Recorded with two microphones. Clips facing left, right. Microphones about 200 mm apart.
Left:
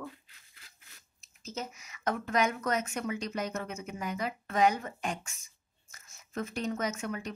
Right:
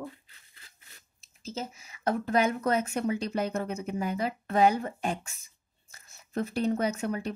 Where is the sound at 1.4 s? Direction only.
30° right (ahead or behind).